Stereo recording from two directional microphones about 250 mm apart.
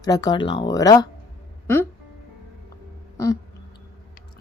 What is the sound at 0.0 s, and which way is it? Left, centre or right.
A woman's voice, centre.